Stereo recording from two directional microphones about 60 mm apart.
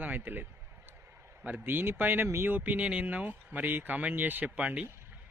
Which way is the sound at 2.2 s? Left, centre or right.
Right.